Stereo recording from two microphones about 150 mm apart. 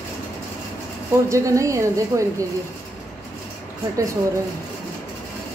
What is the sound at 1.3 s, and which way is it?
Speech, 20° right (ahead or behind).